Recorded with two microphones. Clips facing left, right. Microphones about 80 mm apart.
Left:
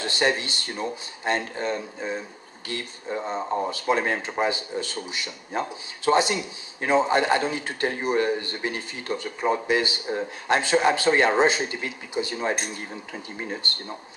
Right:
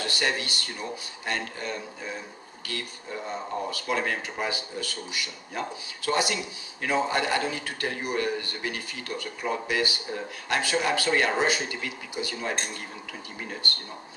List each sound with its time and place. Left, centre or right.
0.0 s speech: left